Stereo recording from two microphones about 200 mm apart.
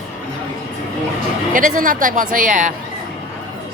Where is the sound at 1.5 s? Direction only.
40° right (ahead or behind).